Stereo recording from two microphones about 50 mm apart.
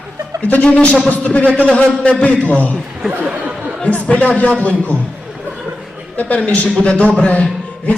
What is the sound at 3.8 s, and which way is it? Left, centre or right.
A man's voice, left.